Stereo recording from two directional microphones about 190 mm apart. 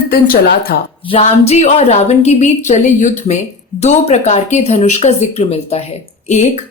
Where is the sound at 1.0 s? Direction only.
35° left (ahead or behind).